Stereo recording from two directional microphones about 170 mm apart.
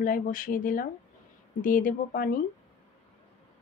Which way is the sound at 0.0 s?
55° left (ahead or behind).